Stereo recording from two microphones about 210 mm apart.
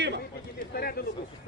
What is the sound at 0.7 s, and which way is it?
Speech, 45° left (ahead or behind).